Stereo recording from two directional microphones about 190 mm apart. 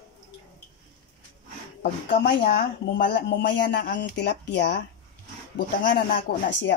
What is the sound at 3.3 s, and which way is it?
Speech, 65° left (ahead or behind).